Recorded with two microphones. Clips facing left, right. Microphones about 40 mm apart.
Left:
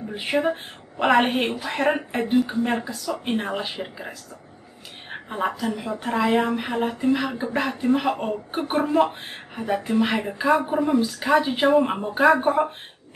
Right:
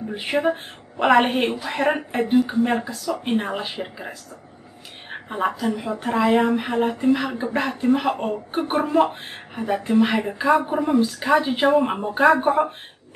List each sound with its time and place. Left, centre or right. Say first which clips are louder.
0.1 s a woman's voice: right 1 dB; centre